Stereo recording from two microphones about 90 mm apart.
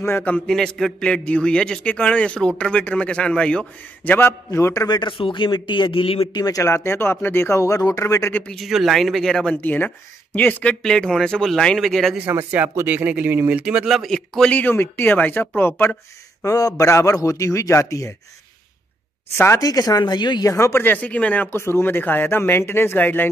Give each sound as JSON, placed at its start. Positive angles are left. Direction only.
{"t": 0.5, "sound": "a man's voice", "side_deg": 5}
{"t": 4.3, "sound": "a man's voice", "side_deg": 35}
{"t": 4.8, "sound": "speech", "side_deg": 60}
{"t": 6.3, "sound": "speech", "side_deg": 45}
{"t": 6.6, "sound": "speech", "side_deg": 30}
{"t": 8.5, "sound": "speech", "side_deg": 0}
{"t": 9.6, "sound": "a man's voice", "side_deg": 20}
{"t": 12.3, "sound": "speech", "side_deg": -20}
{"t": 13.8, "sound": "speech", "side_deg": 0}
{"t": 14.5, "sound": "speech", "side_deg": 20}
{"t": 16.4, "sound": "a man's voice", "side_deg": 40}
{"t": 19.3, "sound": "speech", "side_deg": 30}
{"t": 19.6, "sound": "speech", "side_deg": 40}
{"t": 20.4, "sound": "speech", "side_deg": 35}